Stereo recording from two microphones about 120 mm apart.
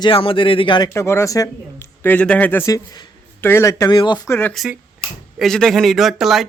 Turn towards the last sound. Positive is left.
turn(degrees=0)  # may be behind; listen again after turning